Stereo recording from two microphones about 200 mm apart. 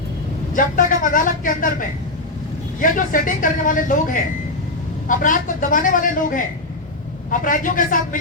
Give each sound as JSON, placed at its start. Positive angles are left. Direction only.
{"t": 0.5, "sound": "speech", "side_deg": 40}
{"t": 2.8, "sound": "speech", "side_deg": 40}